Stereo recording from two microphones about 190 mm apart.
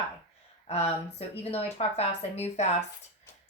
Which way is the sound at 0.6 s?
30° left (ahead or behind).